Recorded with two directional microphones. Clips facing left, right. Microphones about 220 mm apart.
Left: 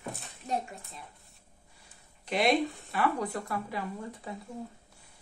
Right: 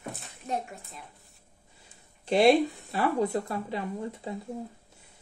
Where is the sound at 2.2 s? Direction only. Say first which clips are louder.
Right 6 dB; 30° right (ahead or behind).